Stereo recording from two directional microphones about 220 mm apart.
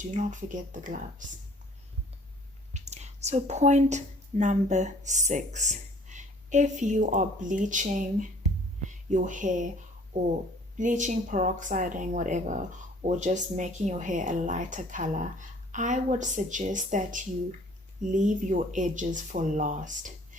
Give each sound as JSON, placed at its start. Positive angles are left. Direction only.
{"t": 0.0, "sound": "speech", "side_deg": -35}
{"t": 2.7, "sound": "speech", "side_deg": -30}